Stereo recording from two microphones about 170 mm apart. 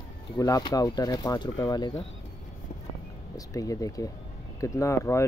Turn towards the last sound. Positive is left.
turn(degrees=15)  # may be behind; listen again after turning